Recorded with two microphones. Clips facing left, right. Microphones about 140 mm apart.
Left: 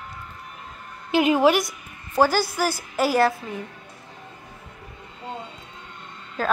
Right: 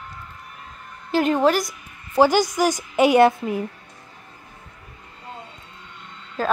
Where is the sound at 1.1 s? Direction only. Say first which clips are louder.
Even; 5° left (ahead or behind).